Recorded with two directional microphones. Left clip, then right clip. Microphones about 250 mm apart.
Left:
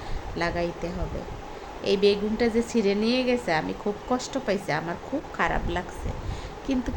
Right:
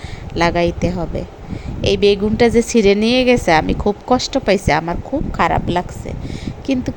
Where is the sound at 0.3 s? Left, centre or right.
Right.